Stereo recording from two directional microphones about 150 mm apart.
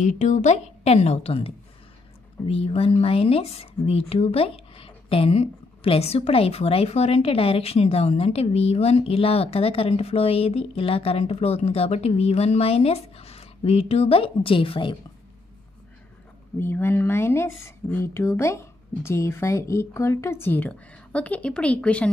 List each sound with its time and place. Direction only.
0.0 s a woman's voice: 55° left (ahead or behind); by 15.0 s 35° left (ahead or behind)
16.5 s speech: 15° left (ahead or behind)